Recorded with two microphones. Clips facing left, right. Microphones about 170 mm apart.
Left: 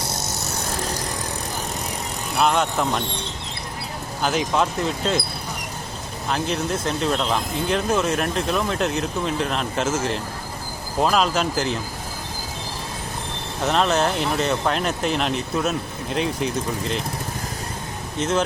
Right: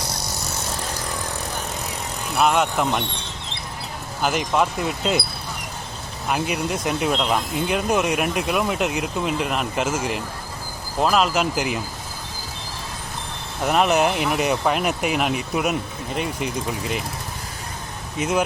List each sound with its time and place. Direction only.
2.4 s speech: 5° right (ahead or behind)
4.2 s speech: 5° right (ahead or behind)
6.2 s speech: 10° right (ahead or behind)
13.7 s speech: 10° right (ahead or behind)
18.2 s speech: 10° right (ahead or behind)